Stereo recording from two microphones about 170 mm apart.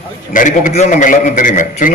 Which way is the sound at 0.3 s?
50° left (ahead or behind).